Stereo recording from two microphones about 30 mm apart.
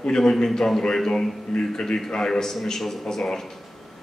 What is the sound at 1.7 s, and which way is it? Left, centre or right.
Speech, left.